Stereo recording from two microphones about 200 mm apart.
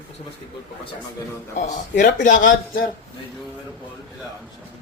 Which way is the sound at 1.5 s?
45° left (ahead or behind).